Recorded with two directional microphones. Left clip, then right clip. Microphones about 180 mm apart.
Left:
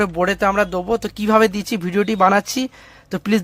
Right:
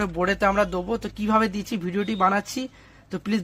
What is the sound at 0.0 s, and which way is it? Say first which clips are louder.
Speech: left 5 dB; 30° left (ahead or behind).